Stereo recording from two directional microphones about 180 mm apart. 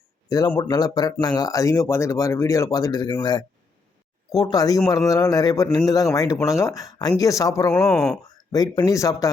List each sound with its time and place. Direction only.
0.3 s speech: 20° left (ahead or behind)
7.7 s speech: centre (ahead or behind)
8.5 s speech: 20° left (ahead or behind)